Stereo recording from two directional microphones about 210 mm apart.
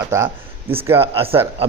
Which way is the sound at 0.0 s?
10° right (ahead or behind).